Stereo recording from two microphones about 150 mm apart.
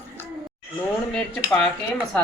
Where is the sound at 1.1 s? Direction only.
5° left (ahead or behind).